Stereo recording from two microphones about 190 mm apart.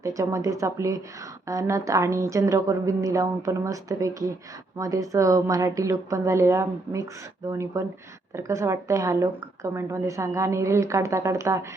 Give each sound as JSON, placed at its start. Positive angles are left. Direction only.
{"t": 0.0, "sound": "a woman's voice", "side_deg": -15}